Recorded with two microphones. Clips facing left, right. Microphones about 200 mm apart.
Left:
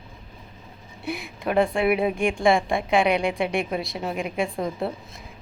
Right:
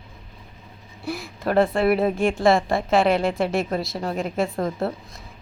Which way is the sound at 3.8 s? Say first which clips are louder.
Right 2 dB; centre (ahead or behind).